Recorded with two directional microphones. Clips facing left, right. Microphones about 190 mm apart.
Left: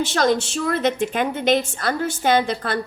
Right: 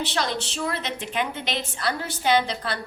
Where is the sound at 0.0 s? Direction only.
45° left (ahead or behind).